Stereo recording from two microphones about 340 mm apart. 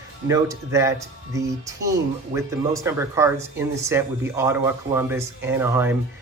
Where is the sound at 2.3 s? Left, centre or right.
Right.